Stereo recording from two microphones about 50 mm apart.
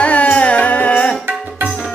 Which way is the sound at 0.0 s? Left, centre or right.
Left.